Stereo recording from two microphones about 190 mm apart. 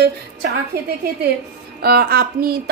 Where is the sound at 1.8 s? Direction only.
55° right (ahead or behind).